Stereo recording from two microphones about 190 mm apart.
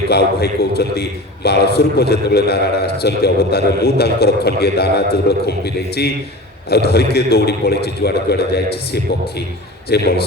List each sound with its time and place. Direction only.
0.1 s a man's voice: 60° left (ahead or behind)